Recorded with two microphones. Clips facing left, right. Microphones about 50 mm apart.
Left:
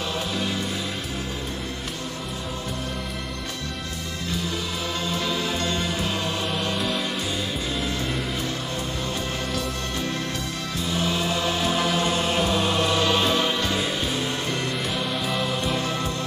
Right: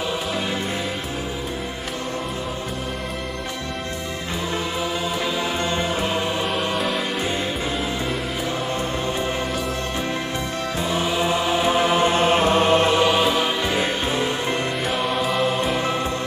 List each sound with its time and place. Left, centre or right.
5.1 s music: centre
10.8 s chant: right
13.1 s music: centre
13.7 s music: right
14.9 s music: centre